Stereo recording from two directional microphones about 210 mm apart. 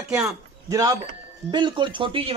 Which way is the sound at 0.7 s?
15° right (ahead or behind).